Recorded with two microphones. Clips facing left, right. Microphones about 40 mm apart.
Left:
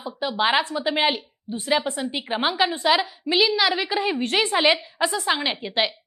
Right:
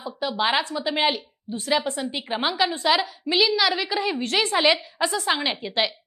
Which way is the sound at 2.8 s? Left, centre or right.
Centre.